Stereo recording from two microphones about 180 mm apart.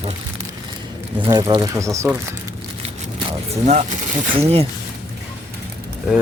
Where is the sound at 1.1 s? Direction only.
25° right (ahead or behind).